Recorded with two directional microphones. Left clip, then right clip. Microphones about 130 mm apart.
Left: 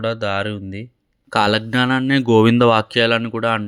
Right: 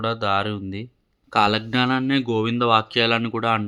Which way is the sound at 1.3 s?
35° left (ahead or behind).